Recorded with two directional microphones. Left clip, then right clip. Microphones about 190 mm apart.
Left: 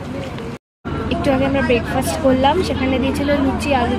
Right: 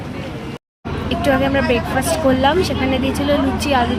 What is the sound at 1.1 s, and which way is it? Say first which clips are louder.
Speech: right 1 dB; 20° right (ahead or behind).